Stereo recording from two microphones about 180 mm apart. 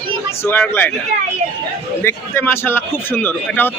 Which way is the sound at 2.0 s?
10° left (ahead or behind).